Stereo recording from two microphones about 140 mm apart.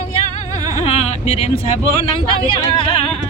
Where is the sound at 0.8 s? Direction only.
45° left (ahead or behind).